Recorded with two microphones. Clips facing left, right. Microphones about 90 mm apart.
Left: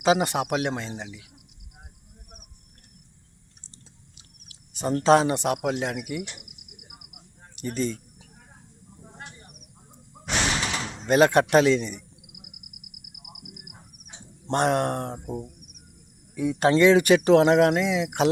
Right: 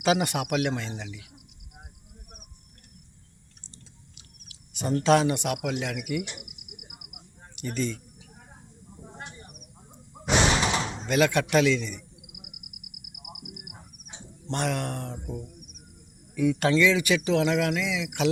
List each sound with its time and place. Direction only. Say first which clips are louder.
0.0 s speech: left 3 dB; 30° left (ahead or behind)
4.4 s speech: left 2 dB; 35° left (ahead or behind)
6.2 s speech: right 1 dB; 5° right (ahead or behind)
6.8 s a sound: even; 5° right (ahead or behind)
7.5 s speech: left 2 dB; 35° left (ahead or behind)
9.1 s a sound: right 1 dB; centre (ahead or behind)
10.2 s slam: right 4 dB; 10° right (ahead or behind)
11.0 s a man's voice: left 6 dB; 40° left (ahead or behind)
12.2 s a sound: right 1 dB; 5° right (ahead or behind)
14.4 s speech: left 7 dB; 45° left (ahead or behind)
16.3 s speech: left 2 dB; 30° left (ahead or behind)
16.7 s speech: left 5 dB; 50° left (ahead or behind)